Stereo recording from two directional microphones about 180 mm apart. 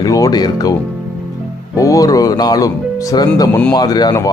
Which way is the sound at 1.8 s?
20° left (ahead or behind).